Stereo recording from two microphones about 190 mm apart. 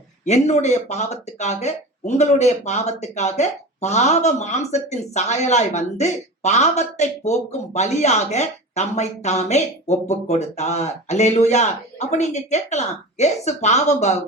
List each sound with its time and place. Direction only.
0.3 s speech: 35° left (ahead or behind)